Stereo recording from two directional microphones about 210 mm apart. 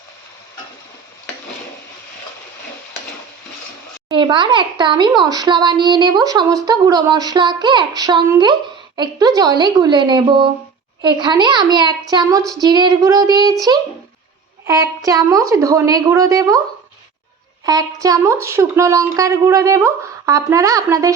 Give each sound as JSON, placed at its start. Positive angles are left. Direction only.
{"t": 4.1, "sound": "a child's voice", "side_deg": -20}
{"t": 17.7, "sound": "speech", "side_deg": -15}